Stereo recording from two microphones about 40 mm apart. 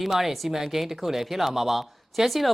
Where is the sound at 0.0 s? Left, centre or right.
Centre.